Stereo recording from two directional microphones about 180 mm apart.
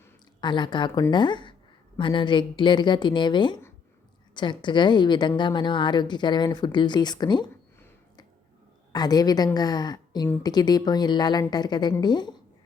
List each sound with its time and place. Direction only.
0.4 s speech: 25° left (ahead or behind)
8.9 s speech: 20° left (ahead or behind)